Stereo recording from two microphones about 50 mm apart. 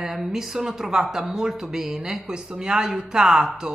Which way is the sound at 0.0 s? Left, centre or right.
Centre.